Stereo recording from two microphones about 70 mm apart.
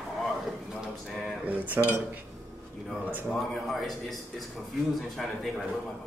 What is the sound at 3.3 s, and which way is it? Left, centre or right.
Speech, centre.